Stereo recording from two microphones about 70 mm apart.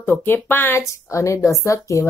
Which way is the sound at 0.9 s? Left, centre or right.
Left.